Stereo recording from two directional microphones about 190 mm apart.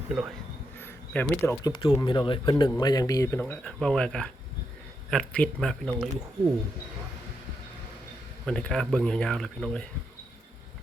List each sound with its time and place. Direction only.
0.1 s speech: centre (ahead or behind)
1.1 s speech: 10° left (ahead or behind)
8.4 s speech: 5° left (ahead or behind)